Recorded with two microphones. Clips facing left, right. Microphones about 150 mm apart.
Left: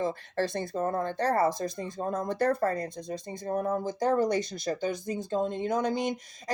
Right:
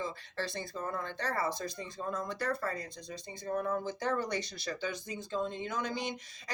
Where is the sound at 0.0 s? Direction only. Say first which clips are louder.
Left 8 dB; 50° left (ahead or behind).